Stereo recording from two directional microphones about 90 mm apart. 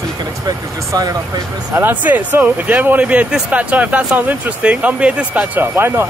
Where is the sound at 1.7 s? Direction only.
20° right (ahead or behind).